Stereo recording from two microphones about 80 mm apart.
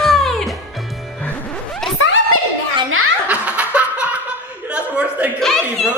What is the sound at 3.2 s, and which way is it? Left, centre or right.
Snicker, centre.